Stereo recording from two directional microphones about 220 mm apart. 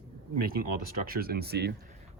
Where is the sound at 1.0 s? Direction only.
40° right (ahead or behind).